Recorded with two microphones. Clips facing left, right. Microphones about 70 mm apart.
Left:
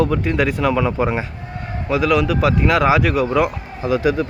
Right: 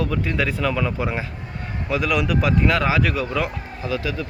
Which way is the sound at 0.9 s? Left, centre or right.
Left.